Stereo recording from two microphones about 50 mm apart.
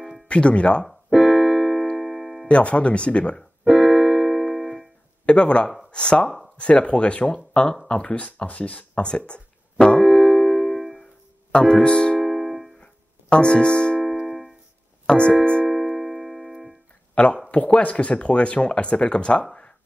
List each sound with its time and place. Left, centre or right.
0.3 s speech: left
1.1 s keyboard: centre
2.0 s music: centre
2.4 s speech: left
3.6 s keyboard: centre
5.2 s speech: left
10.0 s keyboard: centre
11.5 s speech: centre
12.2 s music: centre
12.8 s music: left
14.0 s music: centre
15.0 s keyboard: left
15.6 s music: centre
17.1 s speech: left